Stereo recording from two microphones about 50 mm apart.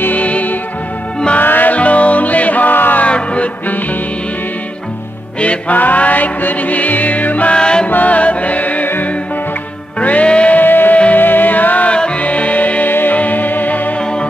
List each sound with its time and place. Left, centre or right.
0.0 s music: left
3.0 s a sound: left
5.4 s music: left
7.5 s music: centre
7.9 s music: left
8.8 s music: left
9.9 s music: left
10.6 s music: left